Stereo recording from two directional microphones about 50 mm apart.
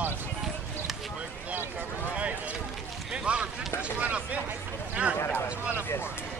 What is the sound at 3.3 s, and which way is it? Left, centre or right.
Speech, right.